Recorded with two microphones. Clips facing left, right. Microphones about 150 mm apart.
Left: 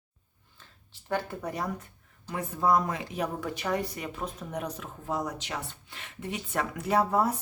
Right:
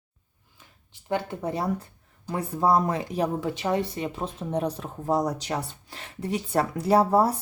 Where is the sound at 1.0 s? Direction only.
20° right (ahead or behind).